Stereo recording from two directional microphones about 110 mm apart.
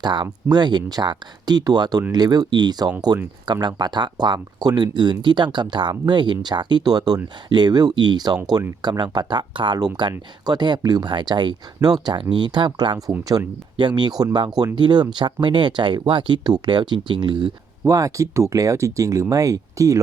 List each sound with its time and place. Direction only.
0.0 s speech: 45° right (ahead or behind)
17.8 s speech: 30° right (ahead or behind)